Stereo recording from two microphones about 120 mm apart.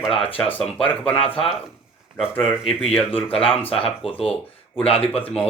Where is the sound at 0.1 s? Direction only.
50° left (ahead or behind).